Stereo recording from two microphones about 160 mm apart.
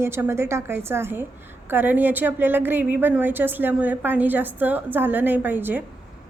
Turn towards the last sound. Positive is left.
turn(degrees=-10)  # may be behind; listen again after turning